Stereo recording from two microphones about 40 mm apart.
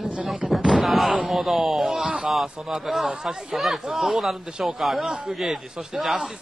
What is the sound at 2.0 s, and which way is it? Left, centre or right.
Speech, right.